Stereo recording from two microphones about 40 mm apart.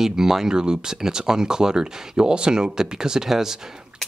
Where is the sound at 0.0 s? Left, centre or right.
Centre.